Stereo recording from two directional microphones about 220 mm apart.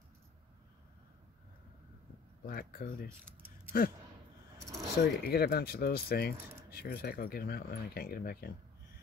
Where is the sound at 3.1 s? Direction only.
10° right (ahead or behind).